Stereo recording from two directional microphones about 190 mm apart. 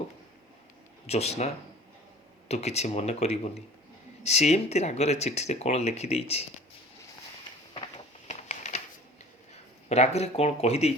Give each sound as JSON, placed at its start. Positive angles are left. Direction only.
{"t": 1.0, "sound": "speech", "side_deg": 35}
{"t": 8.3, "sound": "a sound", "side_deg": 35}
{"t": 9.9, "sound": "speech", "side_deg": 35}